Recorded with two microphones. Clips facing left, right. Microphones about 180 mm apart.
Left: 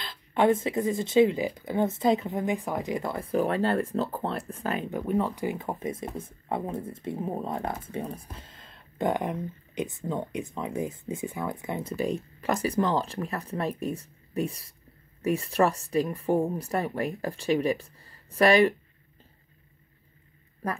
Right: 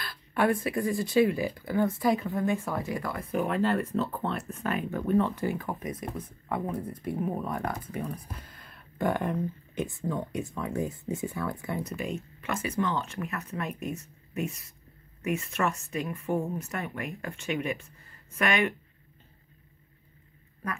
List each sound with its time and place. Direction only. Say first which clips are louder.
0.0 s speech: left 3 dB; 20° left (ahead or behind)
4.9 s speech: right 3 dB; 15° left (ahead or behind)
12.0 s speech: left 5 dB; 35° left (ahead or behind)